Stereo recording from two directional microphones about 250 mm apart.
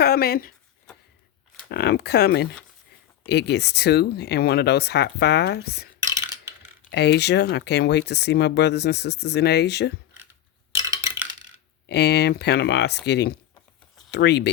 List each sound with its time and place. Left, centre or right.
0.0 s speech: left
1.7 s speech: left
6.0 s a sound: centre
6.9 s speech: left
10.9 s coin: centre
11.9 s speech: left